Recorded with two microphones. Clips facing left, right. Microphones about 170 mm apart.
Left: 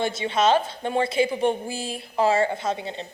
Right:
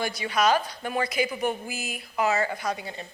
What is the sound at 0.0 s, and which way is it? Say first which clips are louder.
A woman's voice: left 3 dB; 25° left (ahead or behind).